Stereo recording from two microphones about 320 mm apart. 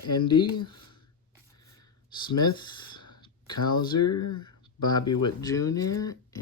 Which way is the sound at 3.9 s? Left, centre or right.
Left.